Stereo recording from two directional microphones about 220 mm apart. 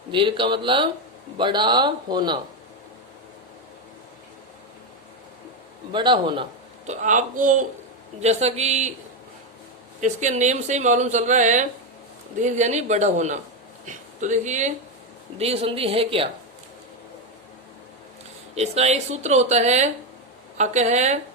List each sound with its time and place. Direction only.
0.1 s speech: 20° right (ahead or behind)
5.9 s speech: 20° right (ahead or behind)
6.8 s speech: 35° right (ahead or behind)
10.0 s speech: 35° right (ahead or behind)
18.5 s speech: 30° right (ahead or behind)